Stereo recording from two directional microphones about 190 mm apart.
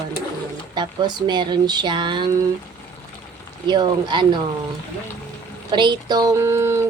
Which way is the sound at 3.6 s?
20° right (ahead or behind).